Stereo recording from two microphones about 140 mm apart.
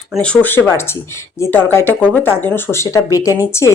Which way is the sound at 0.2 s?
10° left (ahead or behind).